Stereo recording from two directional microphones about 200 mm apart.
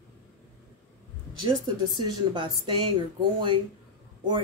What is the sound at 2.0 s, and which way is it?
Speech, 25° right (ahead or behind).